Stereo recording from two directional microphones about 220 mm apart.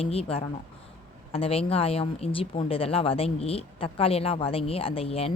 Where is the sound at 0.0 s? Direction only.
25° left (ahead or behind).